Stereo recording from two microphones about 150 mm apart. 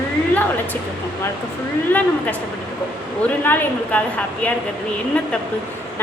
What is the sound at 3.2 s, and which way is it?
Speech, 15° left (ahead or behind).